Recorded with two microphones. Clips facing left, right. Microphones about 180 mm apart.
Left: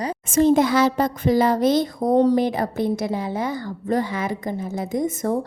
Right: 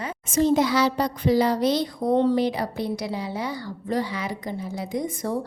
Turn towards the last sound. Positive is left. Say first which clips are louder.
# left 5 dB
turn(degrees=50)  # may be behind; listen again after turning